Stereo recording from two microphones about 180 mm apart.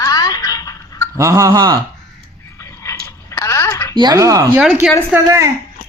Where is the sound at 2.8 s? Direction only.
15° left (ahead or behind).